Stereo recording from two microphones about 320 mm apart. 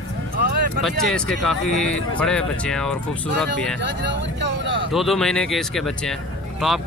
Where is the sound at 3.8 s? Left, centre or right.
Right.